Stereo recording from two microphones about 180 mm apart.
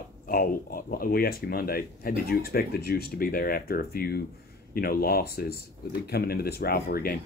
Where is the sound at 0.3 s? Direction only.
55° left (ahead or behind).